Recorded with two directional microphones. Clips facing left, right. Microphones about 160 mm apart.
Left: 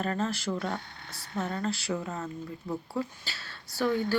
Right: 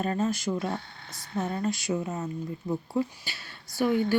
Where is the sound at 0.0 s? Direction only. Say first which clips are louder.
Right 3 dB; 20° right (ahead or behind).